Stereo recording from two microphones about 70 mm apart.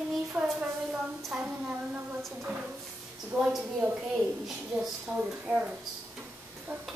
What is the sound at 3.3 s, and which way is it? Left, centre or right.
Speech, centre.